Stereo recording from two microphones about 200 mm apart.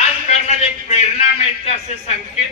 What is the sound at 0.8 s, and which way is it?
Speech, 30° left (ahead or behind).